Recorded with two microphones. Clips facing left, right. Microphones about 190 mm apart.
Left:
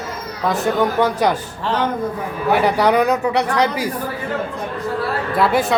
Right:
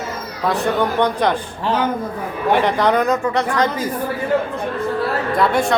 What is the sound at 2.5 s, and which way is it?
Speech, 5° left (ahead or behind).